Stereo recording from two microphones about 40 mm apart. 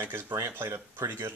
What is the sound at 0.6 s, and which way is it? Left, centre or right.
Speech, right.